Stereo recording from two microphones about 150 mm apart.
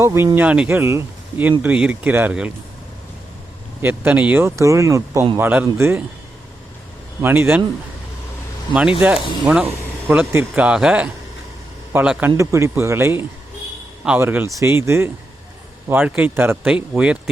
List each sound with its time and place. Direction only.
0.0 s speech: 20° right (ahead or behind)
3.8 s speech: 10° right (ahead or behind)
7.2 s speech: 15° right (ahead or behind)
9.0 s a man's voice: 5° right (ahead or behind)